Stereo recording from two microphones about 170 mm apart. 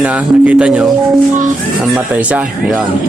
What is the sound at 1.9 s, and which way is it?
Speech, 5° right (ahead or behind).